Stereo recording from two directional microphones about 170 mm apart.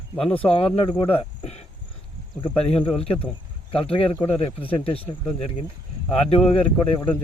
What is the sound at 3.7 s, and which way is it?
Speech, 30° left (ahead or behind).